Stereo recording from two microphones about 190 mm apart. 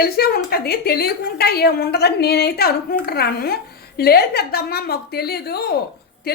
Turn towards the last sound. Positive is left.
turn(degrees=55)  # may be behind; listen again after turning